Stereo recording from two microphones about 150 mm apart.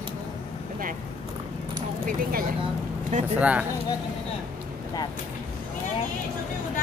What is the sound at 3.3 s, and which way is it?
Speech, 10° right (ahead or behind).